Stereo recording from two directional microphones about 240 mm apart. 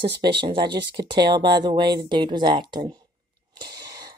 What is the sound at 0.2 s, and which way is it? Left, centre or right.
Speech, right.